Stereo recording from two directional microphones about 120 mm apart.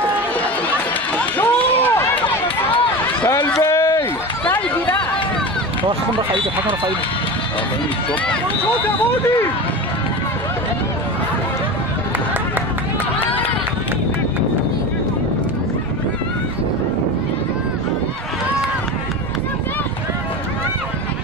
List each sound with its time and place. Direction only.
0.7 s run: 15° left (ahead or behind)
2.2 s run: 45° left (ahead or behind)
3.3 s a sound: 20° left (ahead or behind)